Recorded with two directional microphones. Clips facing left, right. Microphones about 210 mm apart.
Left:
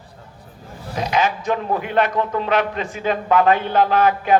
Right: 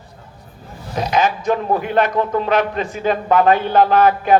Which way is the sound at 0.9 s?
40° right (ahead or behind).